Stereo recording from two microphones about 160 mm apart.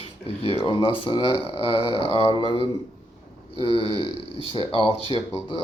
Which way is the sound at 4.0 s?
30° left (ahead or behind).